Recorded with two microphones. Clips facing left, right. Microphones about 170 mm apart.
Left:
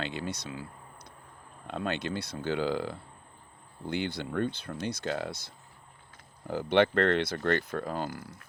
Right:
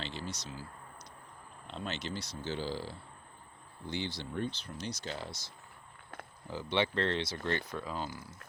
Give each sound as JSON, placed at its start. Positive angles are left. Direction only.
{"t": 0.0, "sound": "speech", "side_deg": 60}
{"t": 6.5, "sound": "speech", "side_deg": 50}